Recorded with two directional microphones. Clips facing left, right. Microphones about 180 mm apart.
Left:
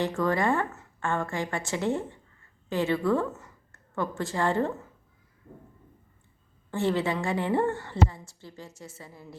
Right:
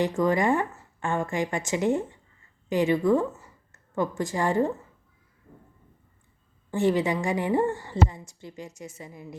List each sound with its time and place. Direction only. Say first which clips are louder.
0.0 s a woman's voice: right 3 dB; 15° right (ahead or behind)
6.7 s a woman's voice: right 3 dB; 15° right (ahead or behind)